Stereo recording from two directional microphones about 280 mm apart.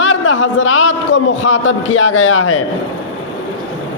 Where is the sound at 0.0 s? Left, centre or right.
Left.